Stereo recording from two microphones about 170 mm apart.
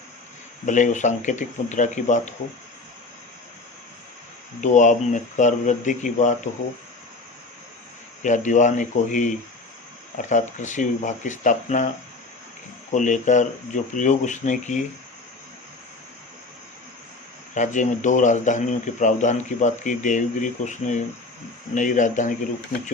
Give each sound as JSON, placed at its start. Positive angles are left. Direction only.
{"t": 0.6, "sound": "speech", "side_deg": 45}
{"t": 4.6, "sound": "speech", "side_deg": 45}
{"t": 8.2, "sound": "speech", "side_deg": 45}
{"t": 12.9, "sound": "speech", "side_deg": 45}
{"t": 17.5, "sound": "speech", "side_deg": 45}